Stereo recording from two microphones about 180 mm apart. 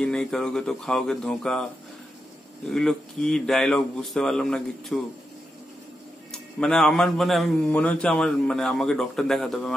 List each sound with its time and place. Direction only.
0.0 s speech: 5° left (ahead or behind)
2.7 s speech: 5° left (ahead or behind)
6.3 s speech: 5° left (ahead or behind)